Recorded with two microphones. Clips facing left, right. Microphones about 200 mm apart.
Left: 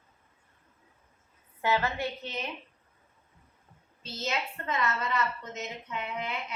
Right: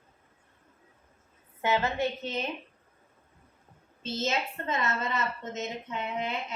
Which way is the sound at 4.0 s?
25° right (ahead or behind).